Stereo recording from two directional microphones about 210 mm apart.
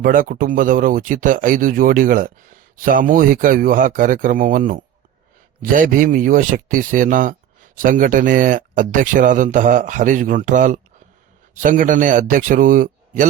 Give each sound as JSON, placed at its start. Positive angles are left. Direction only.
{"t": 0.0, "sound": "speech", "side_deg": -40}